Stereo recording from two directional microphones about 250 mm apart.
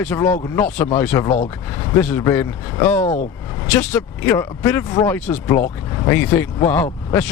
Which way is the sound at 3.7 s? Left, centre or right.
Centre.